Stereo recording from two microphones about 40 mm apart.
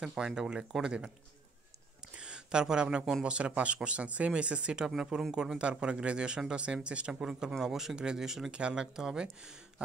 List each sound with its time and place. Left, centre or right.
0.0 s speech: centre
2.1 s a sound: right
3.3 s speech: right
4.8 s speech: centre
5.6 s speech: right
7.1 s speech: centre
7.9 s speech: right
8.5 s speech: right